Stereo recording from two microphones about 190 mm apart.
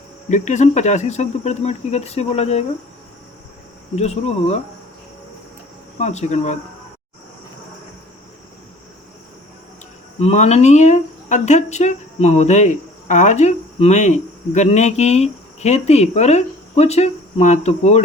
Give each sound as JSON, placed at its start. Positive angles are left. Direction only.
{"t": 0.3, "sound": "speech", "side_deg": 40}
{"t": 3.9, "sound": "speech", "side_deg": 35}
{"t": 6.0, "sound": "speech", "side_deg": 35}
{"t": 10.2, "sound": "speech", "side_deg": 35}